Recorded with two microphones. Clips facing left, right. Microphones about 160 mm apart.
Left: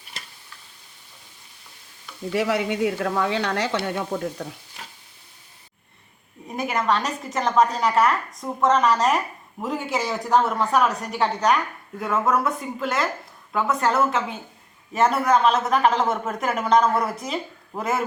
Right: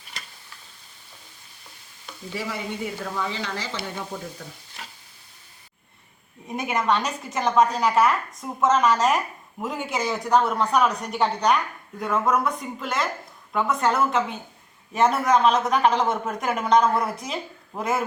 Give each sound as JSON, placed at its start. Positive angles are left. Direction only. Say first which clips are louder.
{"t": 2.3, "sound": "speech", "louder": "left 8 dB", "side_deg": 75}
{"t": 6.5, "sound": "a woman's voice", "louder": "even", "side_deg": 0}